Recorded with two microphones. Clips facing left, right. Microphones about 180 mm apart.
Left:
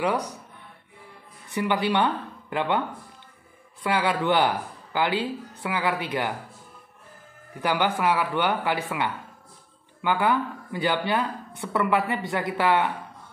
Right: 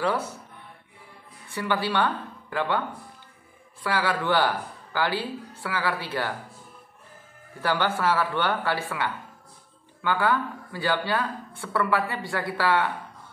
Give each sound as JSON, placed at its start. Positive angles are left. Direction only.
{"t": 0.0, "sound": "speech", "side_deg": 15}
{"t": 1.5, "sound": "speech", "side_deg": 20}
{"t": 3.8, "sound": "speech", "side_deg": 20}
{"t": 7.6, "sound": "speech", "side_deg": 15}